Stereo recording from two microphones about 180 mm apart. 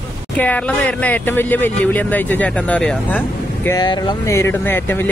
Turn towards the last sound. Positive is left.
turn(degrees=10)  # may be behind; listen again after turning